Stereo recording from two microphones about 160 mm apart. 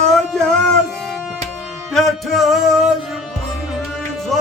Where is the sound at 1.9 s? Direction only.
Centre (ahead or behind).